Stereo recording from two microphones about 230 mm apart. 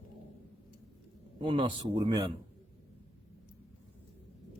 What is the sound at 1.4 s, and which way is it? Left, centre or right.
Speech, right.